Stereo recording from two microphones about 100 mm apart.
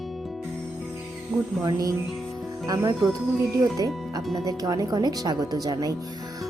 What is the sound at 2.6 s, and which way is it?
Speech, 35° right (ahead or behind).